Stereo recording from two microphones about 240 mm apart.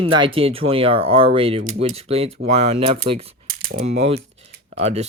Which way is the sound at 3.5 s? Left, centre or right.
Right.